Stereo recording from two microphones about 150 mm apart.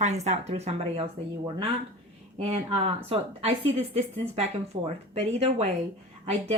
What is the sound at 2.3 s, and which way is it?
A woman's voice, 40° right (ahead or behind).